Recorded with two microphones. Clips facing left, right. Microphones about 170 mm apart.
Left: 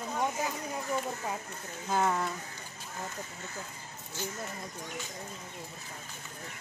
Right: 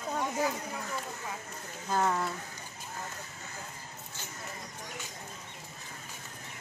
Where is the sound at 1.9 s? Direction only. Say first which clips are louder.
Even; centre (ahead or behind).